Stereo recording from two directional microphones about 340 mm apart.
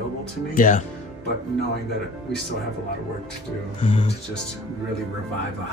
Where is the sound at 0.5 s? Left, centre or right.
Left.